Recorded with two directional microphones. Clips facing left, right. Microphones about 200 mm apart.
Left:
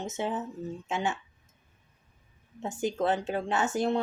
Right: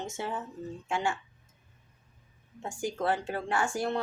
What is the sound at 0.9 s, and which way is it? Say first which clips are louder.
Speech: even; 20° left (ahead or behind).